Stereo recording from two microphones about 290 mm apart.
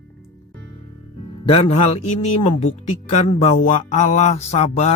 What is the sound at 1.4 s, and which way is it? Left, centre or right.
Speech, centre.